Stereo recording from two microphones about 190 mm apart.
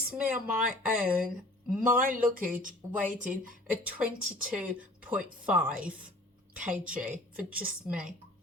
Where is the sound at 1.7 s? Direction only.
5° right (ahead or behind).